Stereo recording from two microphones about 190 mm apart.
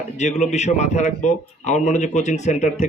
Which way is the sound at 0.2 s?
40° left (ahead or behind).